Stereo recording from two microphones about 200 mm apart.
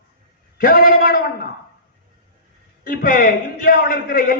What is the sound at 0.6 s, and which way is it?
Speech, 50° left (ahead or behind).